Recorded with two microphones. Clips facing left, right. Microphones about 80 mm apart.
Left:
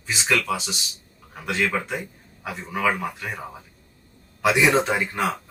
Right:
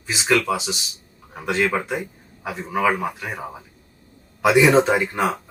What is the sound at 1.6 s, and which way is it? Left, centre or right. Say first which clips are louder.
Speech: right 3 dB; right.